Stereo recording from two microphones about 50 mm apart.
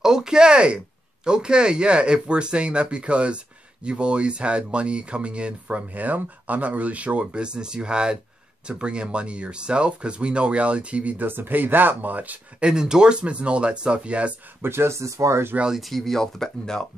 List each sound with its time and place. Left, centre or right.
0.0 s speech: centre; by 11.2 s right
11.2 s speech: right
12.6 s speech: centre
14.6 s speech: right
15.7 s speech: centre